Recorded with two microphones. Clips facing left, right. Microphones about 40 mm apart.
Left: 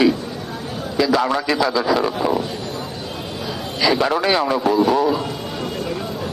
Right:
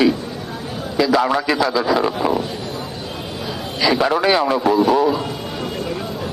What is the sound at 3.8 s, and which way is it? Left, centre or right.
A man's voice, centre.